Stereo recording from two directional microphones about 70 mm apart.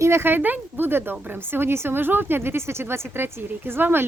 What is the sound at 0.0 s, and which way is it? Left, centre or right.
A woman's voice, right.